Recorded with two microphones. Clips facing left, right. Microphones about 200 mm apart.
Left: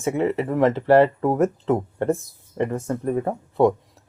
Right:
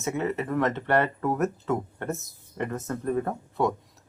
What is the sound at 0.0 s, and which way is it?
Speech, 30° left (ahead or behind).